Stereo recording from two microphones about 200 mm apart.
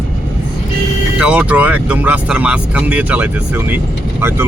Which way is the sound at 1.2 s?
5° right (ahead or behind).